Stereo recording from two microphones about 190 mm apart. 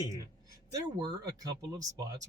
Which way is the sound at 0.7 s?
20° right (ahead or behind).